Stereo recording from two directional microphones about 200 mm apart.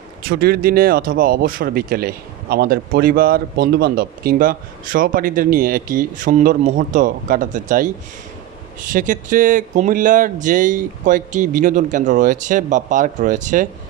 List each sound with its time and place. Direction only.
0.2 s speech: 50° right (ahead or behind)